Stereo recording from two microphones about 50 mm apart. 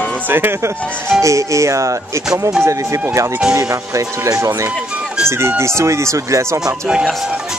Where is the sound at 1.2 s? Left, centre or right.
Right.